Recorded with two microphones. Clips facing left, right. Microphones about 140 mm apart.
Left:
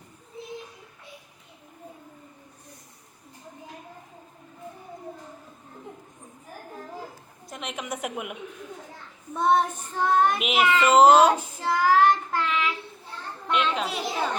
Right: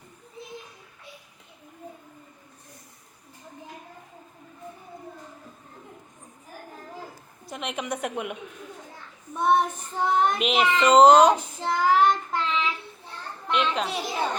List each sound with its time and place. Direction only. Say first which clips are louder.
7.4 s speech: right 3 dB; centre (ahead or behind)
9.3 s child singing: even; 15° right (ahead or behind)
10.3 s speech: even; 5° left (ahead or behind)
11.6 s child singing: left 1 dB; 20° right (ahead or behind)
13.5 s speech: even; 5° left (ahead or behind)